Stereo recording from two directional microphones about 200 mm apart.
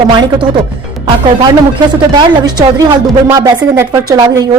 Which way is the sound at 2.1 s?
20° right (ahead or behind).